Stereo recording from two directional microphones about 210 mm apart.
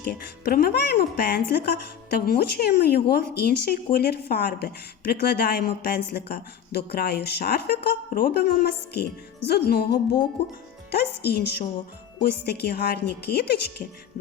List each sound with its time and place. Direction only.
0.0 s speech: 45° left (ahead or behind)